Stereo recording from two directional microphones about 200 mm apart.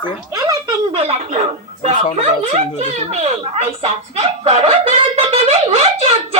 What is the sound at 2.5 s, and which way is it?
A woman's voice, 30° right (ahead or behind).